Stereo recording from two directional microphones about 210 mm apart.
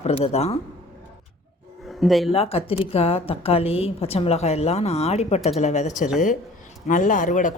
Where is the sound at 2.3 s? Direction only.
30° left (ahead or behind).